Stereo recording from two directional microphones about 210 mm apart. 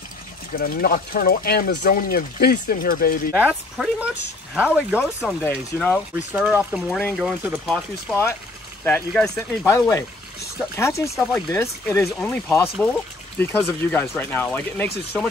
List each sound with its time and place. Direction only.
0.6 s speech: 45° left (ahead or behind)
3.4 s speech: centre (ahead or behind)
5.4 s speech: 10° left (ahead or behind)
6.3 s speech: 5° right (ahead or behind)
8.1 s speech: 10° left (ahead or behind)
9.8 s speech: 15° left (ahead or behind)
11.1 s speech: centre (ahead or behind)
11.6 s speech: 15° left (ahead or behind)